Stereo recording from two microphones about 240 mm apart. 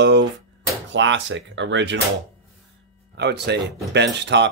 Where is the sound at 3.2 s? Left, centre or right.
Right.